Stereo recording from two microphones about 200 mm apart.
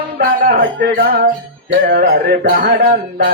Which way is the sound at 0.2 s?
45° right (ahead or behind).